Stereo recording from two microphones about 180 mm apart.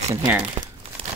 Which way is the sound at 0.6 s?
30° right (ahead or behind).